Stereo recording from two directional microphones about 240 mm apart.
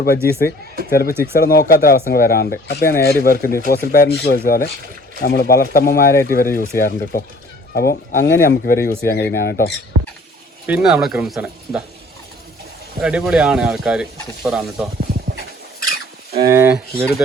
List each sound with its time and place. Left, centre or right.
0.0 s speech: left
10.7 s speech: centre
13.0 s speech: centre
16.3 s speech: centre